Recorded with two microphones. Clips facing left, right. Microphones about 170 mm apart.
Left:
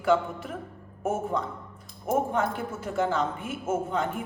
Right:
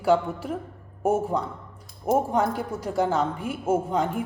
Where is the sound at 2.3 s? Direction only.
40° right (ahead or behind).